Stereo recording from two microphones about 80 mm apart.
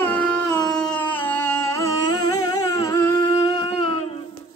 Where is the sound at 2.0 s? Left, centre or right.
Left.